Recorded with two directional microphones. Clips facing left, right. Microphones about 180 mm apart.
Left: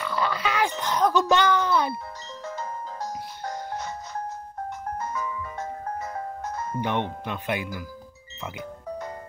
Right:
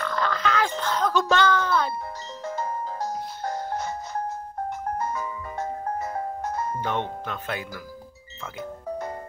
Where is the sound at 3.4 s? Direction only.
50° right (ahead or behind).